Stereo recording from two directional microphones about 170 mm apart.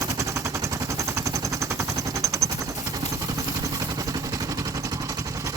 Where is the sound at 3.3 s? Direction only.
20° right (ahead or behind).